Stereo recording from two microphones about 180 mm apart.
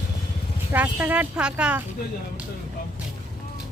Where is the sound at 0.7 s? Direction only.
10° right (ahead or behind).